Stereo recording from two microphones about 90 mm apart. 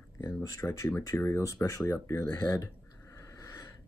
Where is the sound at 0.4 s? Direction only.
40° left (ahead or behind).